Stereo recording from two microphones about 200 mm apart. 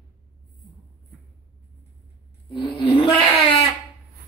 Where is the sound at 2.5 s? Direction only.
25° left (ahead or behind).